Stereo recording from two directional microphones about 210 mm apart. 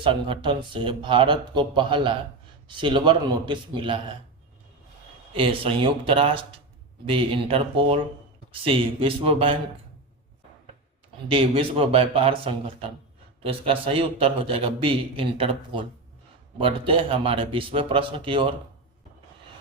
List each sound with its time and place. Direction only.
0.0 s a man's voice: 25° right (ahead or behind)
5.3 s a man's voice: 25° right (ahead or behind)
11.3 s a man's voice: 25° right (ahead or behind)